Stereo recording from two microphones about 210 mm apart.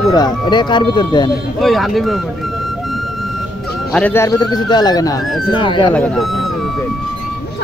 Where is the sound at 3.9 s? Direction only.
10° left (ahead or behind).